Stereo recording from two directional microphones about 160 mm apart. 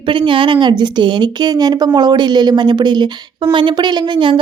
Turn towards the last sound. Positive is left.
turn(degrees=-30)  # may be behind; listen again after turning